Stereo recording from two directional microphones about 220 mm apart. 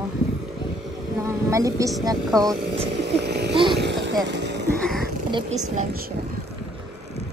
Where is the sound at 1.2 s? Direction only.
15° right (ahead or behind).